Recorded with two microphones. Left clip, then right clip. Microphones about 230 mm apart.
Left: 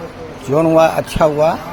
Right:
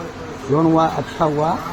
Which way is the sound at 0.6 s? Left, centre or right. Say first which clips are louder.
Left 6 dB; left.